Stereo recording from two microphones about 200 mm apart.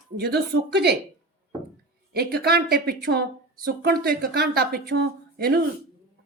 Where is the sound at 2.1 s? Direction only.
50° right (ahead or behind).